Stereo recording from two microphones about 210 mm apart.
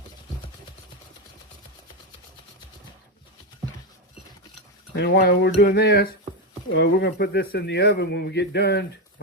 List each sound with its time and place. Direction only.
4.9 s speech: 55° left (ahead or behind)